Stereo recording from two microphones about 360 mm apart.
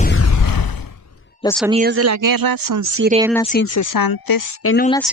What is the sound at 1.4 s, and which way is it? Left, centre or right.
Speech, centre.